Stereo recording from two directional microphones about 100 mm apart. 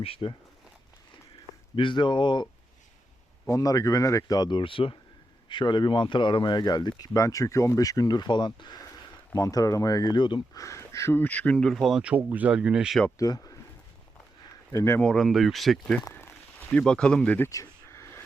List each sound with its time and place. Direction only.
0.0 s speech: 70° left (ahead or behind)
1.7 s speech: 55° left (ahead or behind)
3.5 s speech: 35° left (ahead or behind); by 10.4 s 50° left (ahead or behind)
10.5 s speech: 30° left (ahead or behind); by 12.0 s centre (ahead or behind)
12.0 s speech: 15° right (ahead or behind)
13.1 s speech: 35° left (ahead or behind)
14.7 s speech: 30° left (ahead or behind)
15.0 s speech: 5° left (ahead or behind)
16.1 s speech: 20° left (ahead or behind)
17.5 s a sound: 30° left (ahead or behind)